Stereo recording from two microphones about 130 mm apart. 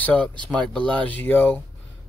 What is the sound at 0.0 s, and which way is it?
Speech, 10° left (ahead or behind).